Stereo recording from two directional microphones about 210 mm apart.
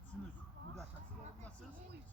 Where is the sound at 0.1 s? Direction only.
Centre (ahead or behind).